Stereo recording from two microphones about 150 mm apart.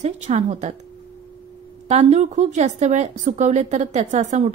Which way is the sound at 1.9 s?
45° right (ahead or behind).